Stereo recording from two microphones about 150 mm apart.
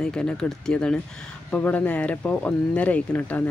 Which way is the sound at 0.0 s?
5° left (ahead or behind).